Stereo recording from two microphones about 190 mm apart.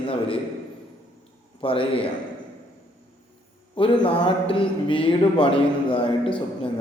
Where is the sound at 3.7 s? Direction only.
25° left (ahead or behind).